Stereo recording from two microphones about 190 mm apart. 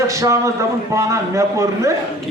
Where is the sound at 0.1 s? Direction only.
15° right (ahead or behind).